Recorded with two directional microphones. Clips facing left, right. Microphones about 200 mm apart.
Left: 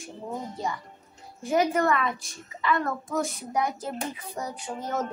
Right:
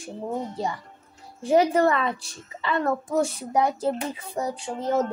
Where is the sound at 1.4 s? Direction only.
30° right (ahead or behind).